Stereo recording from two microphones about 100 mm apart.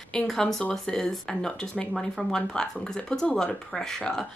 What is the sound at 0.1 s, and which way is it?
Speech, 5° left (ahead or behind).